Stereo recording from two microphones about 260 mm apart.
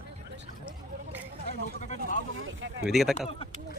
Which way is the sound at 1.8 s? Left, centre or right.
Left.